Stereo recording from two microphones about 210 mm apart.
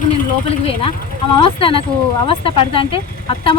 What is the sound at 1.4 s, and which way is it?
Speech, 25° left (ahead or behind).